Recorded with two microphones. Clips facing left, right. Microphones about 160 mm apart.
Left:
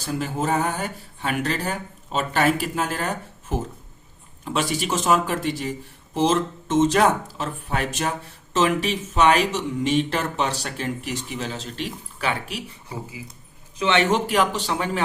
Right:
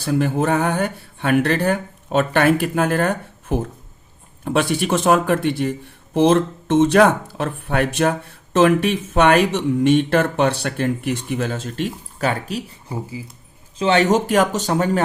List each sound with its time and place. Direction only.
0.0 s speech: 60° right (ahead or behind)
4.4 s speech: 55° right (ahead or behind)
13.7 s speech: 35° right (ahead or behind)